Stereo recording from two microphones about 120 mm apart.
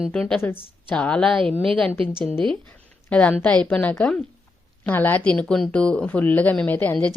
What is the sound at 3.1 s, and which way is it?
Speech, 10° left (ahead or behind).